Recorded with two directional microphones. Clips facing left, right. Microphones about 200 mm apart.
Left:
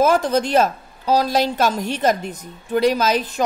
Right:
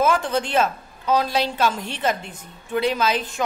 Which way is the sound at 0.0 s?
40° left (ahead or behind).